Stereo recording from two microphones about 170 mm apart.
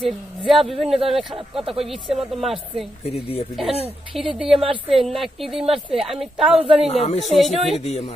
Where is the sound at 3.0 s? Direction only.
35° left (ahead or behind).